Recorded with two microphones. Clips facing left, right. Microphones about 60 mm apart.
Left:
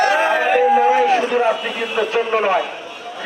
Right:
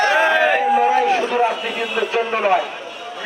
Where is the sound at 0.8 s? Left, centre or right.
Left.